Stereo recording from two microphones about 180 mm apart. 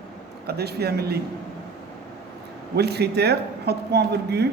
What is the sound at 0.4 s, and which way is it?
Speech, 65° right (ahead or behind).